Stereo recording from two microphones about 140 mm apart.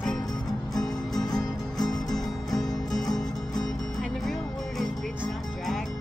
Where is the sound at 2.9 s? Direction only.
30° left (ahead or behind).